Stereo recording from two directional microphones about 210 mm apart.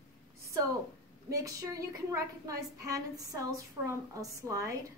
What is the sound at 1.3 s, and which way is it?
A woman's voice, 15° right (ahead or behind).